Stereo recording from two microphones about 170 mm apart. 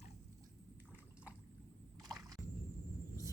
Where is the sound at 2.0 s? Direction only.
20° right (ahead or behind).